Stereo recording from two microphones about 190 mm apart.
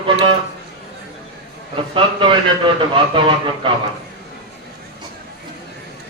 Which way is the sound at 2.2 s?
25° right (ahead or behind).